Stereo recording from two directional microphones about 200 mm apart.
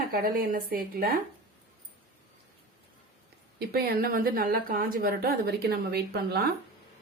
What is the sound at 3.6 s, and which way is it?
A woman's voice, 50° right (ahead or behind).